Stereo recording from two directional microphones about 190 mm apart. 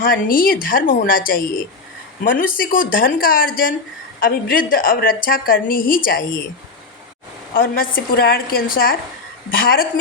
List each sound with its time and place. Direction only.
0.3 s a woman's voice: 50° left (ahead or behind)
2.4 s a woman's voice: 45° left (ahead or behind)
7.5 s a woman's voice: 50° left (ahead or behind)